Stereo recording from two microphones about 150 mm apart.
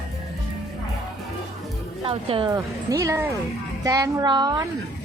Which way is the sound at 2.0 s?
40° right (ahead or behind).